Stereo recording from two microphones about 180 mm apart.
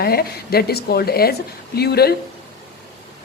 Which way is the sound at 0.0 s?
60° left (ahead or behind).